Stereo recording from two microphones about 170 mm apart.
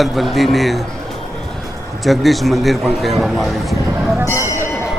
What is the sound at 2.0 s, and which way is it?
A man's voice, centre (ahead or behind).